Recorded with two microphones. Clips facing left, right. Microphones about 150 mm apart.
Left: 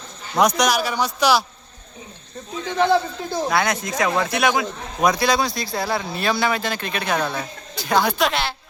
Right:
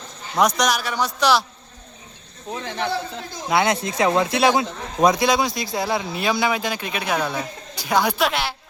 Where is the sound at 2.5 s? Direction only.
60° right (ahead or behind).